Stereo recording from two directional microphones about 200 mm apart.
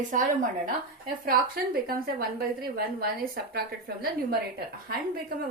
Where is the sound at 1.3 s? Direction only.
50° right (ahead or behind).